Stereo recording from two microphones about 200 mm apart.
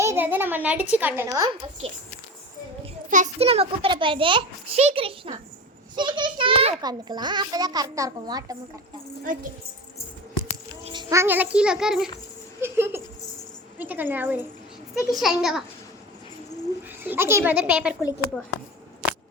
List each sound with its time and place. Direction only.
0.0 s a child's voice: 10° right (ahead or behind)
2.8 s a child's voice: 35° right (ahead or behind); by 8.5 s 20° right (ahead or behind)
9.2 s a woman's voice: 40° right (ahead or behind)
11.1 s a child's voice: 10° right (ahead or behind)
17.0 s a child's voice: 10° right (ahead or behind)